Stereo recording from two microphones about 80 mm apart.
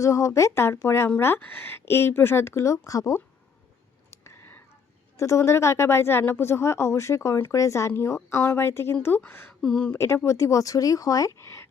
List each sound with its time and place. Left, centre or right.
0.0 s speech: left
4.1 s whispering: left
5.1 s a woman's voice: left
9.6 s speech: centre
9.9 s speech: left